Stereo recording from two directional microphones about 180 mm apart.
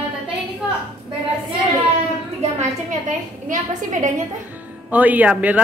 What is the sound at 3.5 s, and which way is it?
Speech, 45° right (ahead or behind).